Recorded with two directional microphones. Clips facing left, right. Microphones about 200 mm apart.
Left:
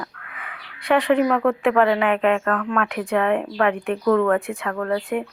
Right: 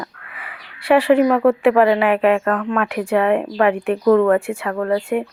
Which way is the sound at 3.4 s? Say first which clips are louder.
Right 4 dB; 15° right (ahead or behind).